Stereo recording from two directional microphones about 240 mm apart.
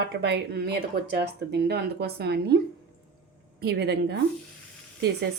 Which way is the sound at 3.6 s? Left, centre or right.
Right.